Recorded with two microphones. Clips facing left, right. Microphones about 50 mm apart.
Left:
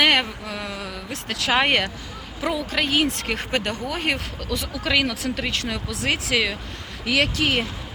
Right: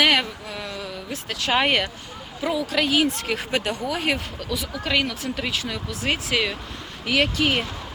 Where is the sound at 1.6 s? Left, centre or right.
Left.